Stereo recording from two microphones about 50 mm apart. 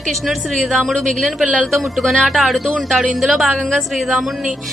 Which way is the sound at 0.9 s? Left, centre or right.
Centre.